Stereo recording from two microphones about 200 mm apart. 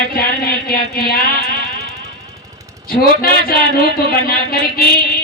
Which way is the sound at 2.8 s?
50° left (ahead or behind).